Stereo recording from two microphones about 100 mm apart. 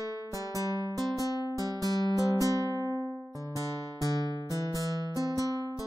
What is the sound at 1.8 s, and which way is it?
Music, 35° left (ahead or behind).